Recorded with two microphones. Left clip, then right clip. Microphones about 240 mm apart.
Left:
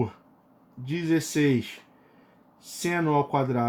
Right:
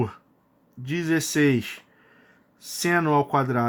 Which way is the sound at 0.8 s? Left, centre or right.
Right.